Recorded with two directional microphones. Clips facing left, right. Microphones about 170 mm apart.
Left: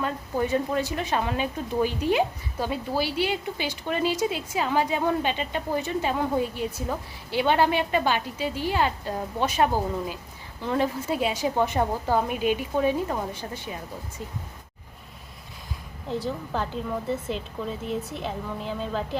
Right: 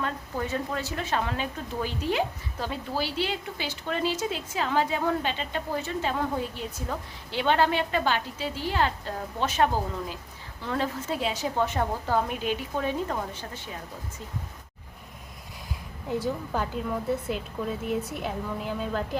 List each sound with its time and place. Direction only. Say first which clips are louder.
0.0 s a woman's voice: left 4 dB; 15° left (ahead or behind)
16.0 s a woman's voice: right 1 dB; 20° right (ahead or behind)
16.5 s a woman's voice: even; 5° right (ahead or behind)